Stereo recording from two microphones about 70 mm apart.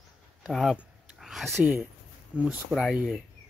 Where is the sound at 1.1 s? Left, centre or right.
Centre.